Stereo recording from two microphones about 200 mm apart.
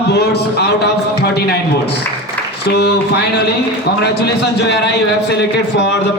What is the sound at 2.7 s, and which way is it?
Speech, 55° left (ahead or behind).